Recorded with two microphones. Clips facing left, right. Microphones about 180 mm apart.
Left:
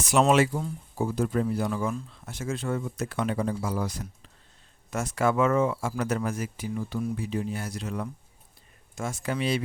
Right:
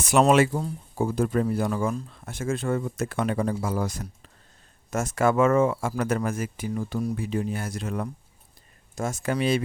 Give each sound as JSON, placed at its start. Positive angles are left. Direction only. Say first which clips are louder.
{"t": 0.0, "sound": "speech", "louder": "right 2 dB", "side_deg": -55}
{"t": 7.2, "sound": "speech", "louder": "right 2 dB", "side_deg": -55}